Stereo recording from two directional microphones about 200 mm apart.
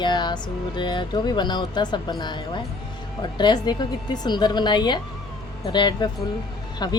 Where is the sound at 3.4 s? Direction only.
20° left (ahead or behind).